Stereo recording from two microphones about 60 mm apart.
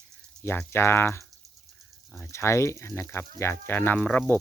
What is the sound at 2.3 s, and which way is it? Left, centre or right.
Speech, left.